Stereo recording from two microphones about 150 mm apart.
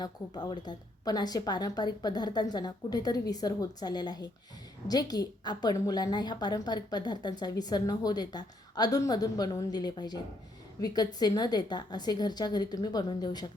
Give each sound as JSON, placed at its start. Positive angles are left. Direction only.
{"t": 0.0, "sound": "a woman's voice", "side_deg": 30}